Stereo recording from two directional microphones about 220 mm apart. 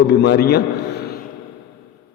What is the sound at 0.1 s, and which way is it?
Speech, 50° left (ahead or behind).